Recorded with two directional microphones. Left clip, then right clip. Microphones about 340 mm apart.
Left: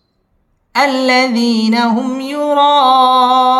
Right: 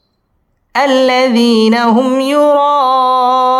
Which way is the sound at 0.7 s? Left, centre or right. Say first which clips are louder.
Right 2 dB; centre.